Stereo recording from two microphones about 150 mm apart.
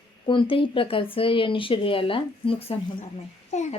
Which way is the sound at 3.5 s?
50° left (ahead or behind).